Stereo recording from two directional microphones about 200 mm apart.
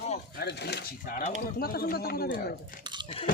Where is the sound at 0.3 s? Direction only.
55° left (ahead or behind).